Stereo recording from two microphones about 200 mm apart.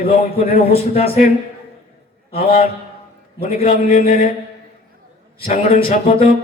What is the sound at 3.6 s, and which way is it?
Mantra, 40° left (ahead or behind).